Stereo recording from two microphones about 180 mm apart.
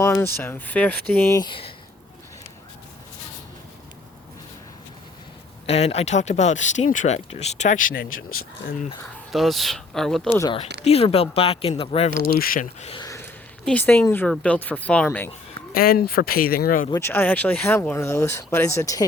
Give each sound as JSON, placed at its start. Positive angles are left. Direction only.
{"t": 0.0, "sound": "speech", "side_deg": 15}
{"t": 5.6, "sound": "speech", "side_deg": 35}
{"t": 9.3, "sound": "speech", "side_deg": 0}
{"t": 10.8, "sound": "speech", "side_deg": 35}
{"t": 12.4, "sound": "speech", "side_deg": 50}
{"t": 13.0, "sound": "a sound", "side_deg": 20}
{"t": 13.7, "sound": "speech", "side_deg": 10}
{"t": 15.7, "sound": "speech", "side_deg": 55}
{"t": 16.9, "sound": "speech", "side_deg": 10}